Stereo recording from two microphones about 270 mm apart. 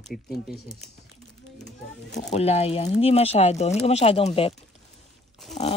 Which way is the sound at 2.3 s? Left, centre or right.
Left.